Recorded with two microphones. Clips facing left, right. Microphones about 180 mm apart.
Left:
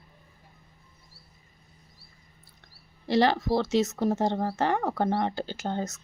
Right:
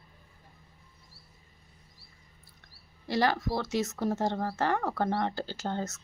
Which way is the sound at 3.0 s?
25° left (ahead or behind).